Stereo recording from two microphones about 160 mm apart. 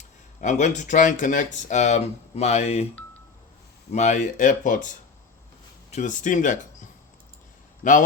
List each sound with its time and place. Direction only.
0.4 s speech: 50° left (ahead or behind)
3.9 s speech: 50° left (ahead or behind)
7.8 s speech: 55° left (ahead or behind)